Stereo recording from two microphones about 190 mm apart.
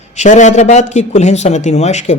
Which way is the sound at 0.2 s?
40° left (ahead or behind).